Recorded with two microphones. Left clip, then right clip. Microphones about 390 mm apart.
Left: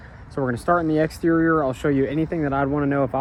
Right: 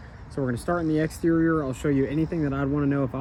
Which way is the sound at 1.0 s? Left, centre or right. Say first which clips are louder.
Left 4 dB; centre.